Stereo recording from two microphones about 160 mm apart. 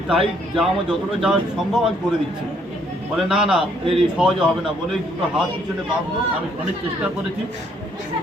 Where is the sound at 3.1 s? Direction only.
5° right (ahead or behind).